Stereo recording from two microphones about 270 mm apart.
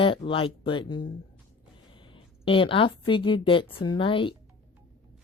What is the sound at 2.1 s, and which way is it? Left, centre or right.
Speech, centre.